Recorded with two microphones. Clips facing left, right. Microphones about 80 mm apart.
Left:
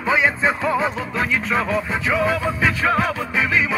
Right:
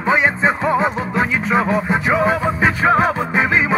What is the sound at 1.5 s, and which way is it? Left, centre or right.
Music, right.